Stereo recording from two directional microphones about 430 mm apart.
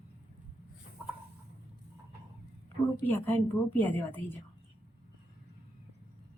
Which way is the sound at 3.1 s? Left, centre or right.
Centre.